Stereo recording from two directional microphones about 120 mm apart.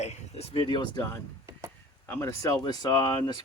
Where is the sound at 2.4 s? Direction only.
30° left (ahead or behind).